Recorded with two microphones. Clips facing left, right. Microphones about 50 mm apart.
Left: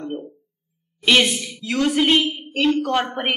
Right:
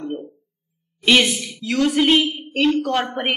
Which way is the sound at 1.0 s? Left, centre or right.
Centre.